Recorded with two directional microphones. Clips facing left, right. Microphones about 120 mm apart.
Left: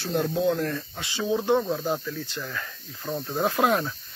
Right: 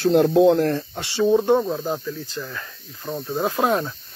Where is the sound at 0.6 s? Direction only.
35° right (ahead or behind).